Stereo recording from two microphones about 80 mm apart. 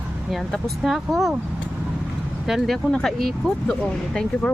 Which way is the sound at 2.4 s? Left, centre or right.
Centre.